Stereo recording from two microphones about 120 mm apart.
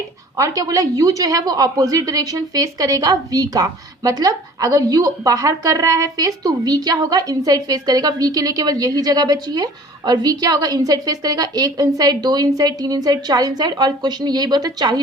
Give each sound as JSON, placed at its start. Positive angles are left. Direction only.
{"t": 0.3, "sound": "a woman's voice", "side_deg": -30}